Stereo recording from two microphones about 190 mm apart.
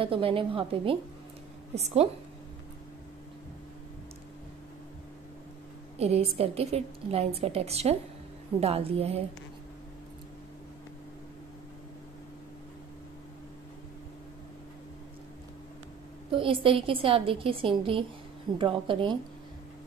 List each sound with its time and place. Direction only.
0.0 s a woman's voice: 30° right (ahead or behind)
5.9 s a woman's voice: 35° right (ahead or behind)
16.3 s a woman's voice: 30° right (ahead or behind)